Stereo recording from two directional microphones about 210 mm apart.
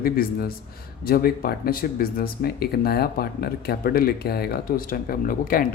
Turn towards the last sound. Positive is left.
turn(degrees=45)  # may be behind; listen again after turning